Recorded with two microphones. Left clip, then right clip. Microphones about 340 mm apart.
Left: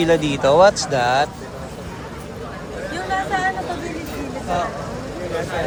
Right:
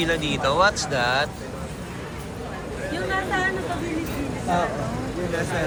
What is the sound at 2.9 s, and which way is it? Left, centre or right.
Vehicle, centre.